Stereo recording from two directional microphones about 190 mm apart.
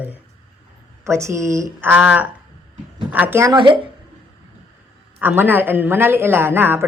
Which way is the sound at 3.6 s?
25° right (ahead or behind).